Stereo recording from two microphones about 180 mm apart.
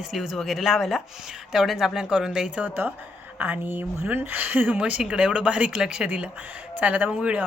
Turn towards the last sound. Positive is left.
turn(degrees=-5)  # may be behind; listen again after turning